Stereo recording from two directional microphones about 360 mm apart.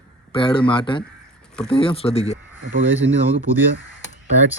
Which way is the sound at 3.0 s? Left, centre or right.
Right.